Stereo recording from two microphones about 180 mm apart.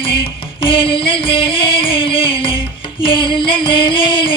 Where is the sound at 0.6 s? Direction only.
30° left (ahead or behind).